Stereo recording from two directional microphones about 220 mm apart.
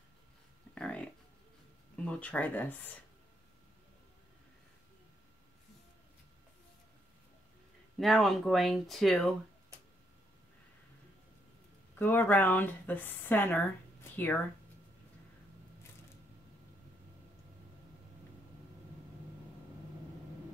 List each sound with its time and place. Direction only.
0.7 s a sound: 5° left (ahead or behind)
2.0 s speech: 5° left (ahead or behind)
8.0 s speech: centre (ahead or behind)
12.0 s speech: 10° left (ahead or behind)